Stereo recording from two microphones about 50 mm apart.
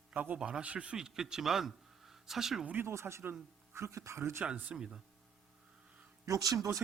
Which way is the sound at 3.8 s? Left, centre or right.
Right.